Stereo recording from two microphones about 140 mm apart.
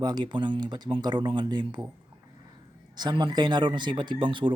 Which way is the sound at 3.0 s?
30° right (ahead or behind).